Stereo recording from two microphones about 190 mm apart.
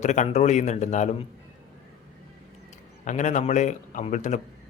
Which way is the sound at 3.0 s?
40° left (ahead or behind).